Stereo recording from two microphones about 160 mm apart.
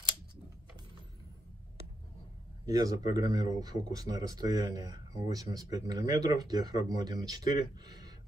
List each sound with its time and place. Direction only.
2.6 s speech: 20° right (ahead or behind)